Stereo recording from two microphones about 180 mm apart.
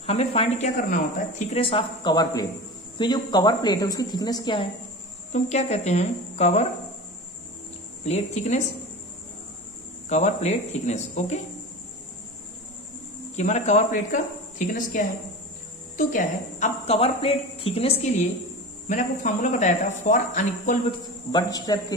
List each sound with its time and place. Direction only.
0.0 s a woman's voice: 35° left (ahead or behind)
0.7 s speech: 50° left (ahead or behind)
1.5 s a woman's voice: 30° left (ahead or behind)
5.3 s a woman's voice: 40° left (ahead or behind)
8.0 s a woman's voice: 40° left (ahead or behind)
10.0 s a woman's voice: 40° left (ahead or behind)
13.4 s a woman's voice: 40° left (ahead or behind)
21.3 s a woman's voice: 20° left (ahead or behind)